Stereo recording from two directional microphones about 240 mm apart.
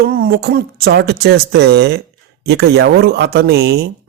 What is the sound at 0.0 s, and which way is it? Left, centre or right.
Speech, right.